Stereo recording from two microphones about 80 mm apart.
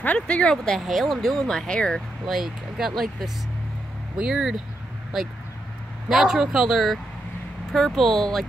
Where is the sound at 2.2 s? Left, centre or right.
Centre.